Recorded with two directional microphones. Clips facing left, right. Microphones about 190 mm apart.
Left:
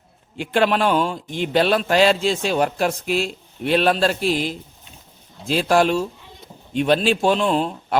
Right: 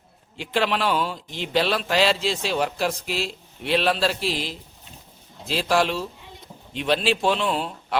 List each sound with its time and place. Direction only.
0.3 s a man's voice: 50° left (ahead or behind)